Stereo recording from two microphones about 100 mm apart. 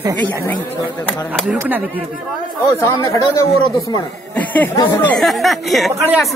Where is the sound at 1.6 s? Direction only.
20° right (ahead or behind).